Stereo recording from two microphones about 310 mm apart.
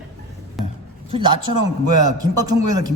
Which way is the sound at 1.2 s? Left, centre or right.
Right.